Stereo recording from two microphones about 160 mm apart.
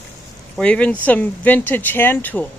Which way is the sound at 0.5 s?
5° left (ahead or behind).